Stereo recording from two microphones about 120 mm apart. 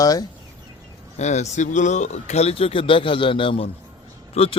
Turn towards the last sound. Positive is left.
turn(degrees=55)  # may be behind; listen again after turning